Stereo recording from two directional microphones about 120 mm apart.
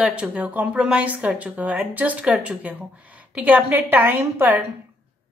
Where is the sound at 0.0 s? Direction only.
10° right (ahead or behind).